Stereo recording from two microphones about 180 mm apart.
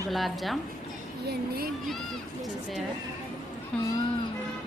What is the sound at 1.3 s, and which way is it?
Speech, 55° right (ahead or behind).